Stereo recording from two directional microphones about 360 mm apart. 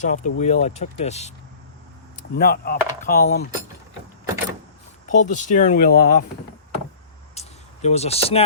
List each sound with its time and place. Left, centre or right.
0.0 s speech: centre
5.0 s speech: left
7.3 s a sound: centre